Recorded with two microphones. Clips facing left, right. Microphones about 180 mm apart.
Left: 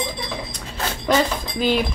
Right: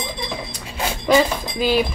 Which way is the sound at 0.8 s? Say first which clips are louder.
Right 3 dB; 10° right (ahead or behind).